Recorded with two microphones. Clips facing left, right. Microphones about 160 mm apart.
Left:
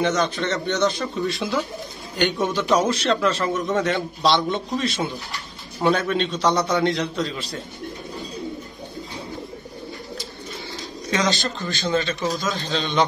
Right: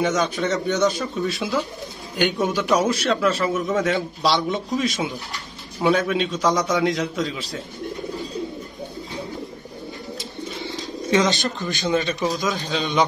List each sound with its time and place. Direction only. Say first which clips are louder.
0.0 s a man's voice: even; 10° right (ahead or behind)
11.1 s a man's voice: right 3 dB; 20° right (ahead or behind)